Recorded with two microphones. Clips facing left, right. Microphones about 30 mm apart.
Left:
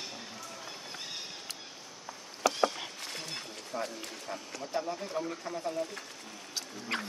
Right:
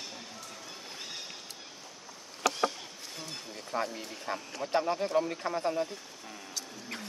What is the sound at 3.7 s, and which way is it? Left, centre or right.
Speech, right.